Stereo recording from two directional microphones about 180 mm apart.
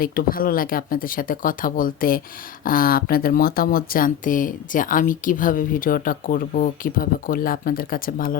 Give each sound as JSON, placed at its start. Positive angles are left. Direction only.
{"t": 0.0, "sound": "speech", "side_deg": 55}